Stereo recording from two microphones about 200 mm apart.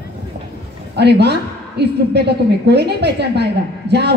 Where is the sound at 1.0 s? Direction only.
55° right (ahead or behind).